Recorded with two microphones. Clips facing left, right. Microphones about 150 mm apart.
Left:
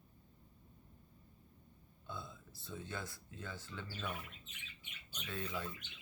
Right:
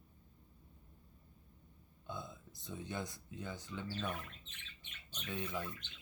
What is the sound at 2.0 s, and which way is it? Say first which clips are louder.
Speech: right 2 dB; 20° right (ahead or behind).